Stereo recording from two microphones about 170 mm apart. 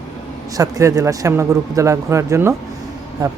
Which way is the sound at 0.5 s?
20° right (ahead or behind).